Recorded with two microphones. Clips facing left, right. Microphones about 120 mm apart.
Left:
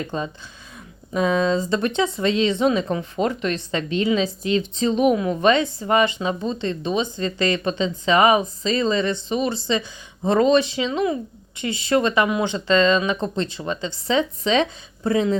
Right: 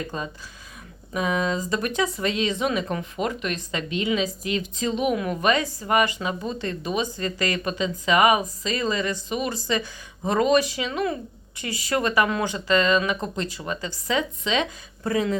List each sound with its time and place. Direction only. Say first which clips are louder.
0.1 s a woman's voice: left 4 dB; 30° left (ahead or behind)